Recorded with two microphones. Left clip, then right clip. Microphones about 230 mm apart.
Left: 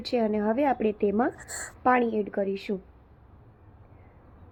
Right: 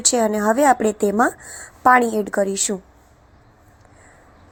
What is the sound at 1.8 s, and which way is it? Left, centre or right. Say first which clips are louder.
Speech: right 9 dB; centre.